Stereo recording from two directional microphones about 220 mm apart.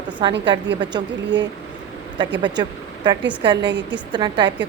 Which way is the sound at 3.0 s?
20° right (ahead or behind).